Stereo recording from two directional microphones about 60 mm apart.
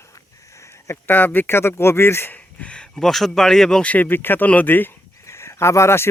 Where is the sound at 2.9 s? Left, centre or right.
Centre.